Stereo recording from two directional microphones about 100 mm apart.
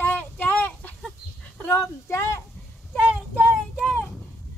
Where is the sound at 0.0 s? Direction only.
15° left (ahead or behind).